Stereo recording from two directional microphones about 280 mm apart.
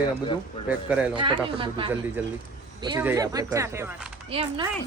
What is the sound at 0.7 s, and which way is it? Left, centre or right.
Speech, centre.